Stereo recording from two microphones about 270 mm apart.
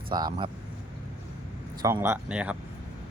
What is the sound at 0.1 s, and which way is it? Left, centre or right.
Speech, centre.